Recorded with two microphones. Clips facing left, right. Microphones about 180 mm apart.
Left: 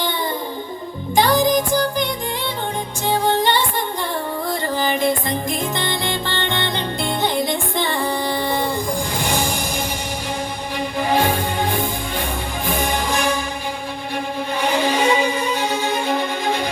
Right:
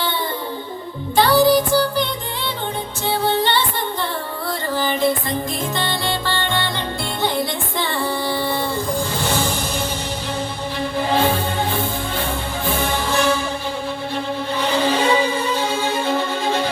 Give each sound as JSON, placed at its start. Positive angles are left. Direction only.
{"t": 1.1, "sound": "music", "side_deg": 15}
{"t": 3.1, "sound": "music", "side_deg": 15}
{"t": 4.8, "sound": "music", "side_deg": 15}
{"t": 10.8, "sound": "music", "side_deg": 15}
{"t": 14.6, "sound": "music", "side_deg": 15}